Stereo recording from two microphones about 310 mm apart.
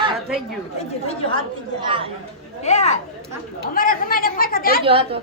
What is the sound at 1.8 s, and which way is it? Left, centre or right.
Speech, centre.